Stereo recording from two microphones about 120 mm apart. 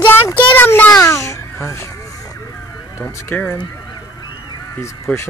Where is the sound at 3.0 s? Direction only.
15° left (ahead or behind).